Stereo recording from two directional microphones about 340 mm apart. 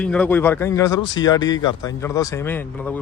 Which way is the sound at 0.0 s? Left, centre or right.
Centre.